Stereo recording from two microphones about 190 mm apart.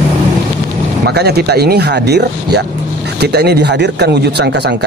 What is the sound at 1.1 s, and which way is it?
Speech, 60° right (ahead or behind).